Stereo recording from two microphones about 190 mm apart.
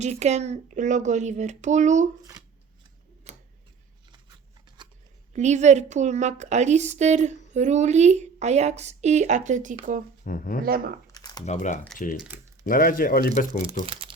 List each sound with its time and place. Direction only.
0.0 s a woman's voice: 35° right (ahead or behind)
3.3 s tick-tock: 35° right (ahead or behind)
4.8 s shuffling cards: 25° right (ahead or behind)
5.3 s a woman's voice: 40° right (ahead or behind)
10.2 s speech: 50° left (ahead or behind)
10.6 s speech: 50° right (ahead or behind)
11.1 s a sound: 20° left (ahead or behind)
11.4 s speech: 40° left (ahead or behind)
13.8 s crumpling: 30° right (ahead or behind)